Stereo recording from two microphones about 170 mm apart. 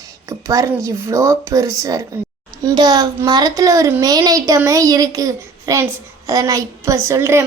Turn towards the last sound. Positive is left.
turn(degrees=-15)  # may be behind; listen again after turning